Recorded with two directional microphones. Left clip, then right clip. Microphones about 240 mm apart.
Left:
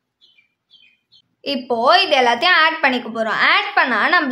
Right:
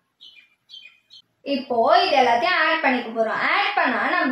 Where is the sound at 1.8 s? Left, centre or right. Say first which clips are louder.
Left 4 dB; left.